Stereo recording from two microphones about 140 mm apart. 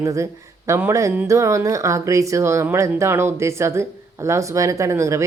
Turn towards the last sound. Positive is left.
turn(degrees=-20)  # may be behind; listen again after turning